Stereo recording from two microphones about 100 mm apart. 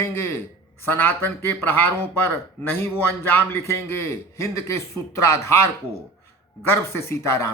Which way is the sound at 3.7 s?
30° left (ahead or behind).